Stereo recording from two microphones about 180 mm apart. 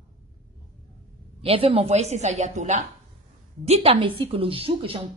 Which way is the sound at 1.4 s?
30° right (ahead or behind).